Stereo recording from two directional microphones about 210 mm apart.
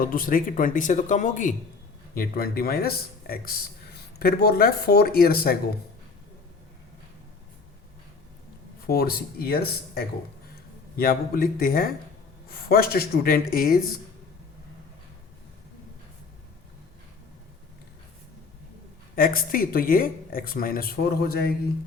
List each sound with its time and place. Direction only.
0.0 s speech: 40° left (ahead or behind)
8.9 s speech: 45° left (ahead or behind)
19.1 s speech: 45° left (ahead or behind)